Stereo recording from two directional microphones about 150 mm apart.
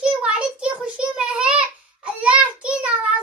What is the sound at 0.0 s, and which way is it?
Child singing, 5° right (ahead or behind).